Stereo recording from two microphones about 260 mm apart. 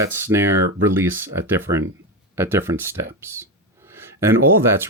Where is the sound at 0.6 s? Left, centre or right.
Right.